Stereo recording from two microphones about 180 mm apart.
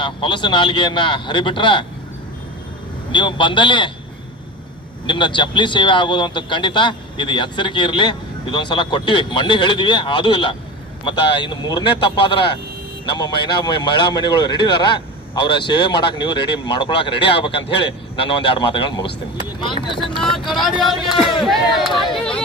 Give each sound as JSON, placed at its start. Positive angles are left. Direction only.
{"t": 0.0, "sound": "a man's voice", "side_deg": 25}
{"t": 3.1, "sound": "a man's voice", "side_deg": 25}
{"t": 5.0, "sound": "a man's voice", "side_deg": 25}
{"t": 20.1, "sound": "vehicle", "side_deg": 0}
{"t": 20.5, "sound": "speech", "side_deg": 0}